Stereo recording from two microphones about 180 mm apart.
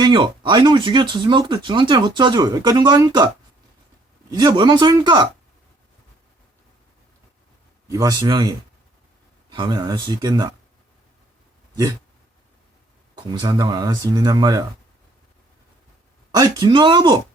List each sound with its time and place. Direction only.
0.0 s speech: 25° right (ahead or behind)
4.3 s speech: 25° right (ahead or behind)
7.9 s speech: 20° right (ahead or behind)
13.1 s speech: 25° right (ahead or behind)
16.3 s speech: 20° right (ahead or behind)